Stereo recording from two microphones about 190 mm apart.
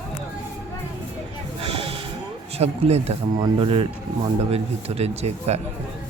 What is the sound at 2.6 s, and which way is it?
Speech, 35° right (ahead or behind).